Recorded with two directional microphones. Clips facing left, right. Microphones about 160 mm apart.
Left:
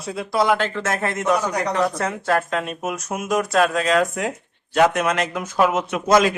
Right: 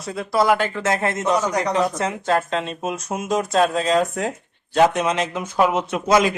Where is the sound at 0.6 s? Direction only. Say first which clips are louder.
Right 2 dB; 15° right (ahead or behind).